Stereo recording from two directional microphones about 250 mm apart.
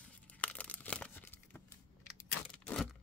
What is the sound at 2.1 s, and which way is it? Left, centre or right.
Crack, centre.